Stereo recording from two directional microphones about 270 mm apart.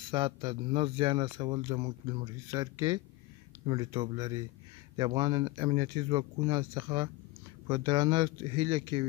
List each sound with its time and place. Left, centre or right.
0.1 s speech: centre